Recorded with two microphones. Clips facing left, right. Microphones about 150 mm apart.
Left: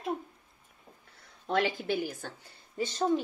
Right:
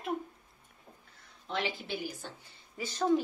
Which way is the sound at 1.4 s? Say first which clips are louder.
Left 7 dB; 50° left (ahead or behind).